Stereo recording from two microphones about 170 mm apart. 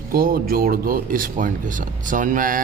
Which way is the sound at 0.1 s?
60° right (ahead or behind).